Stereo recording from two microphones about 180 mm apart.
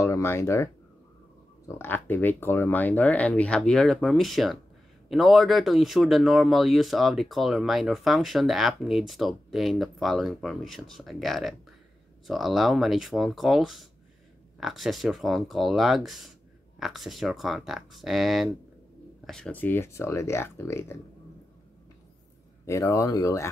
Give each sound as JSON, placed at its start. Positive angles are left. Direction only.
{"t": 0.0, "sound": "speech", "side_deg": 15}
{"t": 1.7, "sound": "speech", "side_deg": 10}
{"t": 22.7, "sound": "speech", "side_deg": 15}